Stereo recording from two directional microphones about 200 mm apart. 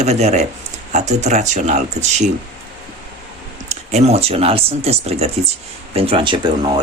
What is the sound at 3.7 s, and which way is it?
Speech, 35° right (ahead or behind).